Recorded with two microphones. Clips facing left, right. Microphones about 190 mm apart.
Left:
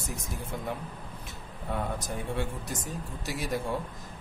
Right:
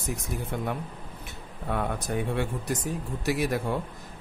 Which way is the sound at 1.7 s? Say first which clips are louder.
Right 4 dB; 60° right (ahead or behind).